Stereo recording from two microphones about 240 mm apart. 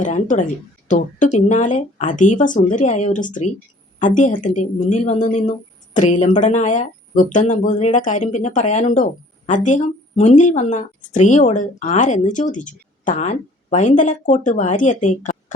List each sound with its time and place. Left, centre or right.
0.0 s speech: left